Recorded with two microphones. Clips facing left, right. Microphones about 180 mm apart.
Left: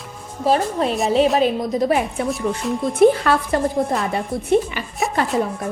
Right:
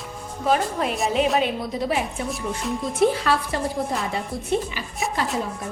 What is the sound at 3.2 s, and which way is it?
Speech, 50° left (ahead or behind).